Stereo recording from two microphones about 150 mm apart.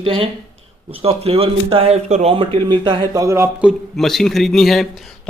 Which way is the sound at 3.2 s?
15° right (ahead or behind).